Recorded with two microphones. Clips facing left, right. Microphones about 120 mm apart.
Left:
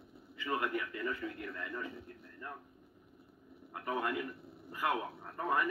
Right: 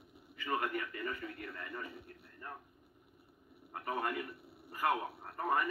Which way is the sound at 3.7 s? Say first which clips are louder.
Left 1 dB; 45° right (ahead or behind).